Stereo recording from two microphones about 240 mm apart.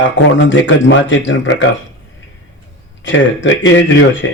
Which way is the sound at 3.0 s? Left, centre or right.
Left.